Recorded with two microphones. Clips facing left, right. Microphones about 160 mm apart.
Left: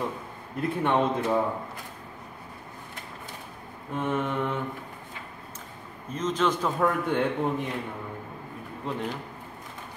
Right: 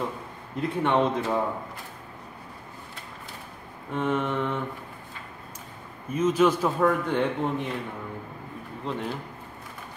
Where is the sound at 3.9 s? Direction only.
5° left (ahead or behind).